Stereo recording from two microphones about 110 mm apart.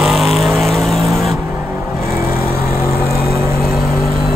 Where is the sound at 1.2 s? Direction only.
25° right (ahead or behind).